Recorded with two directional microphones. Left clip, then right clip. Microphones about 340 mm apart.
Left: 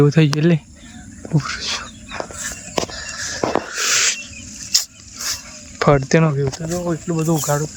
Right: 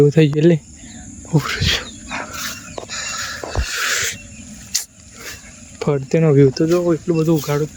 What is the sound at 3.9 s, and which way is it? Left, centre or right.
Wild animals, centre.